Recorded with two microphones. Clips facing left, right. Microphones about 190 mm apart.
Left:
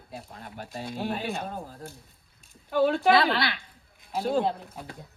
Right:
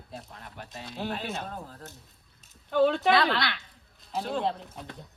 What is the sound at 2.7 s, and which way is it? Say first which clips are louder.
Speech: even; 5° left (ahead or behind).